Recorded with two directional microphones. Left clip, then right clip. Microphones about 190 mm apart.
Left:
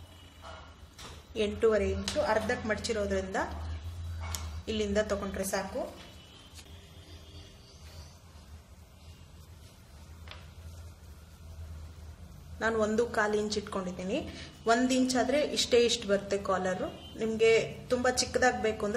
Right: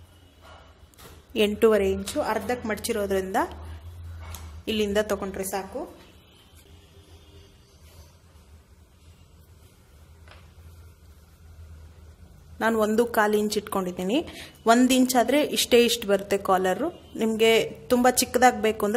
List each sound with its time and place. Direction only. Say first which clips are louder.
1.3 s a woman's voice: right 7 dB; 55° right (ahead or behind)
4.6 s a woman's voice: right 6 dB; 60° right (ahead or behind)
12.5 s a woman's voice: right 6 dB; 55° right (ahead or behind)